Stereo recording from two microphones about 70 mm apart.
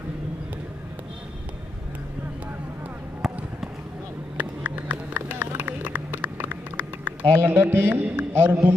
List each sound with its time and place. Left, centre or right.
4.4 s vehicle: right
5.6 s a sound: right
7.4 s a man's voice: right